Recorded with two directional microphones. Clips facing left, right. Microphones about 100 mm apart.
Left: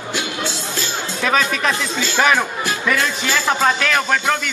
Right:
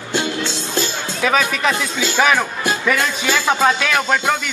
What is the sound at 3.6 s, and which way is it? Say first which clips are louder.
Speech: right 1 dB; 5° right (ahead or behind).